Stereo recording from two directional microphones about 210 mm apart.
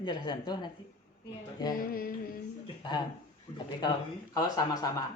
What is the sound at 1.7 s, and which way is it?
Music, 45° left (ahead or behind).